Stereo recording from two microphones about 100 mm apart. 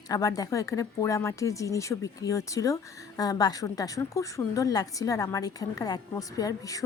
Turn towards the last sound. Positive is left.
turn(degrees=35)  # may be behind; listen again after turning